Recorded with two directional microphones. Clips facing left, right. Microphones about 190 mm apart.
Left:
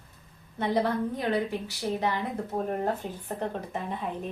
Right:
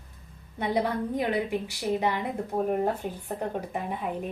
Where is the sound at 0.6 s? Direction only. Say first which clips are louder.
Left 1 dB; 15° right (ahead or behind).